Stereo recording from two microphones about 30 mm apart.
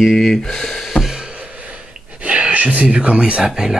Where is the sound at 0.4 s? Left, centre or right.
Centre.